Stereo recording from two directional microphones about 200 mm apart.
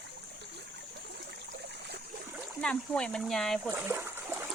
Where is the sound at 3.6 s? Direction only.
10° right (ahead or behind).